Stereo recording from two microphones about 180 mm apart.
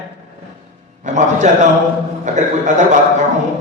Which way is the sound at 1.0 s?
40° right (ahead or behind).